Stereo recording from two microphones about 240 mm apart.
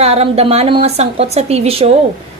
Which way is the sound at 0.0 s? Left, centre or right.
Right.